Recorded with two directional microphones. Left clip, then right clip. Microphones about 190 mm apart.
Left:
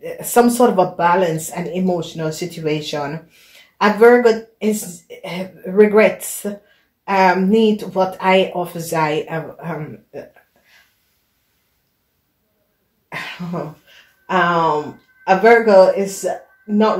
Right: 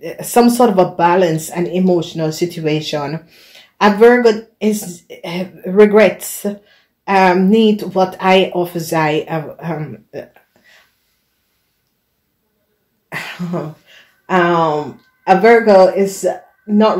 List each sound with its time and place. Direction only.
0.0 s speech: 50° right (ahead or behind)
13.1 s cough: 35° right (ahead or behind)
14.2 s speech: 40° right (ahead or behind)